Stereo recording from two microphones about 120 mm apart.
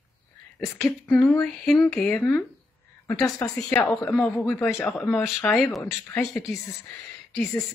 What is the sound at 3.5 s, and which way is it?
Speech, 5° left (ahead or behind).